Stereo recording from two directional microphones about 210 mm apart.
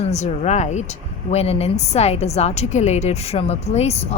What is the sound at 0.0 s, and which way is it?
A woman's voice, 30° left (ahead or behind).